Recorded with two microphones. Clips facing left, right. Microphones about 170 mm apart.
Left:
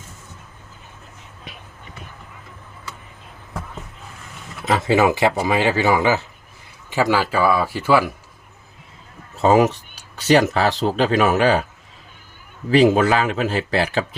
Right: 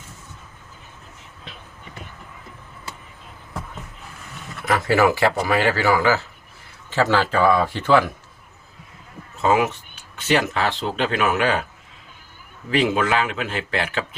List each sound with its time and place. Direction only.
1.5 s a sound: 10° left (ahead or behind)
4.6 s speech: 20° left (ahead or behind)
9.4 s speech: 35° left (ahead or behind)
12.7 s speech: 40° left (ahead or behind)